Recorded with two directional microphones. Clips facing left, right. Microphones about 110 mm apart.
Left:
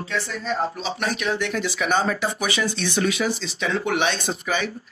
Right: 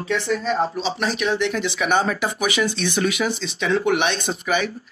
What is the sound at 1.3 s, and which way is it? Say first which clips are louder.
Speech: right 3 dB; 20° right (ahead or behind).